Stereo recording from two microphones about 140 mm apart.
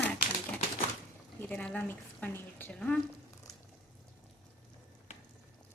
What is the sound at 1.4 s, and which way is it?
Speech, 10° left (ahead or behind).